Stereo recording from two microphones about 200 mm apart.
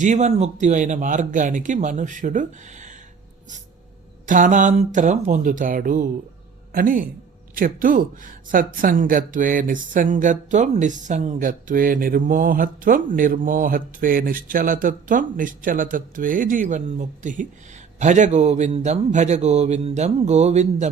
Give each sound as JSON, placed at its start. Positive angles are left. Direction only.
{"t": 0.0, "sound": "speech", "side_deg": -35}
{"t": 4.3, "sound": "speech", "side_deg": -40}